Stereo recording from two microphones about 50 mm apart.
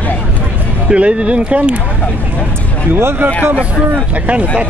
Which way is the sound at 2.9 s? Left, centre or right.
Right.